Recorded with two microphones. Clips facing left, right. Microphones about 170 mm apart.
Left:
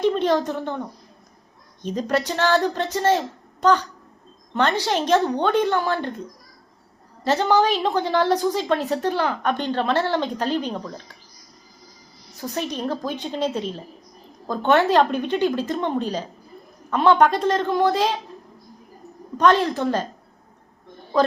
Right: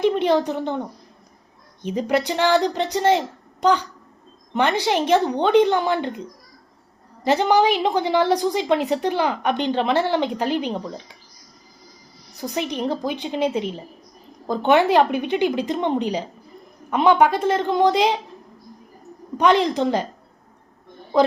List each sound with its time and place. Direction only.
0.0 s a woman's voice: 15° right (ahead or behind)
7.3 s a woman's voice: 15° right (ahead or behind)
12.4 s a woman's voice: 15° right (ahead or behind)
19.4 s a woman's voice: 15° right (ahead or behind)